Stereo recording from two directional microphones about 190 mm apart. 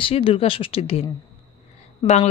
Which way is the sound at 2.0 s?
35° left (ahead or behind).